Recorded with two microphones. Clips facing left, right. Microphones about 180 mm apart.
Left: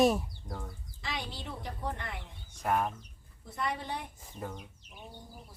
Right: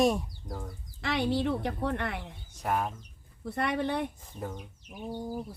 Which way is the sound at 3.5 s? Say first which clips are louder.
Right 6 dB; 65° right (ahead or behind).